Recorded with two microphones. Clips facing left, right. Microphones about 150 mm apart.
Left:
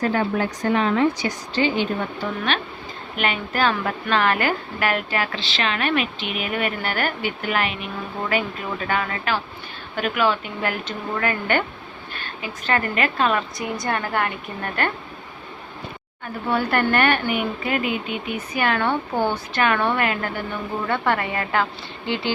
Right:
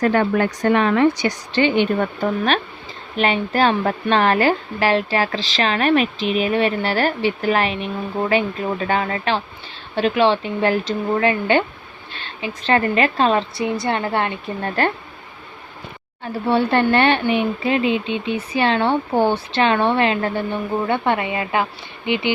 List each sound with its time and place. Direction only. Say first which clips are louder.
0.0 s a woman's voice: right 4 dB; 70° right (ahead or behind); by 2.6 s 45° right (ahead or behind)
3.2 s a woman's voice: right 5 dB; 35° right (ahead or behind)
16.2 s speech: right 5 dB; 30° right (ahead or behind)